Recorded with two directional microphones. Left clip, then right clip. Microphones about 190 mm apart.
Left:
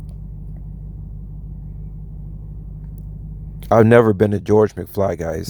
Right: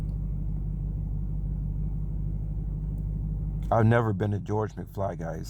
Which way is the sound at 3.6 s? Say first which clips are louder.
Left 13 dB; 35° left (ahead or behind).